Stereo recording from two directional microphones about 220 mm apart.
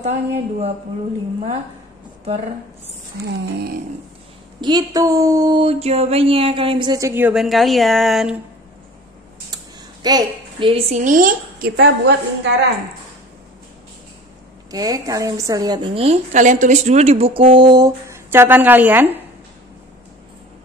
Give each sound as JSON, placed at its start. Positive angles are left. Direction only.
{"t": 0.0, "sound": "a woman's voice", "side_deg": -30}
{"t": 4.6, "sound": "a woman's voice", "side_deg": -20}
{"t": 10.0, "sound": "a woman's voice", "side_deg": -20}
{"t": 14.7, "sound": "a woman's voice", "side_deg": -15}